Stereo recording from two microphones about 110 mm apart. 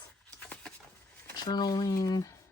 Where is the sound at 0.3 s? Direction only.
10° left (ahead or behind).